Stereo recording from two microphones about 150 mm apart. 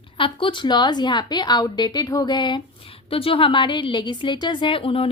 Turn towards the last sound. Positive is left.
turn(degrees=35)  # may be behind; listen again after turning